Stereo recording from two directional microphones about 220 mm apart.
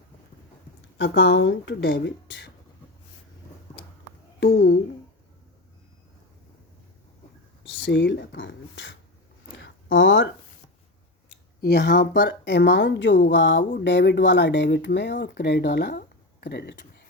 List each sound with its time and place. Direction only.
0.9 s speech: 55° left (ahead or behind)
4.4 s speech: 50° left (ahead or behind)
7.6 s speech: 60° left (ahead or behind)
9.6 s a sound: 60° left (ahead or behind)
11.6 s speech: 50° left (ahead or behind)